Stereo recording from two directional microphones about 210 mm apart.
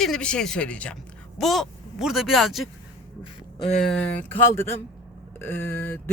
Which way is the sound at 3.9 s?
5° left (ahead or behind).